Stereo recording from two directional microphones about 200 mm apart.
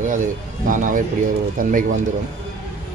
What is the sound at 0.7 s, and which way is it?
Speech, 40° right (ahead or behind).